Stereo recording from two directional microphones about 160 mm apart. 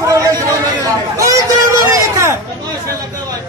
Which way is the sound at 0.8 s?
20° right (ahead or behind).